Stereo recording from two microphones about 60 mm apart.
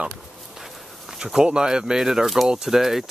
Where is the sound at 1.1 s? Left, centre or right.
Centre.